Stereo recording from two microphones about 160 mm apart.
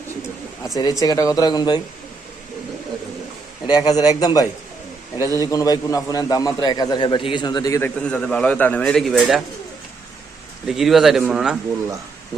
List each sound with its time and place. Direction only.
0.8 s a man's voice: 25° left (ahead or behind)
3.7 s a man's voice: 25° left (ahead or behind)
7.8 s a man's voice: 10° left (ahead or behind)
10.7 s a man's voice: centre (ahead or behind)